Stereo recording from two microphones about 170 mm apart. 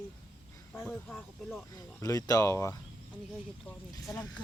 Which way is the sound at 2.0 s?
20° left (ahead or behind).